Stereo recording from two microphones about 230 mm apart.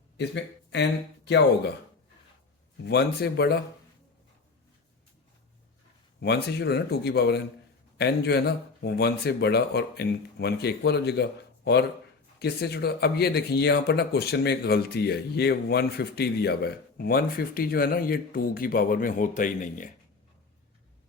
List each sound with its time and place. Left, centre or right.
0.7 s speech: left
2.8 s speech: left
6.1 s speech: left